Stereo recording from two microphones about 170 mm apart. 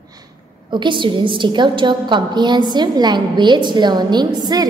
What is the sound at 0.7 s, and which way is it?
A woman's voice, 30° right (ahead or behind).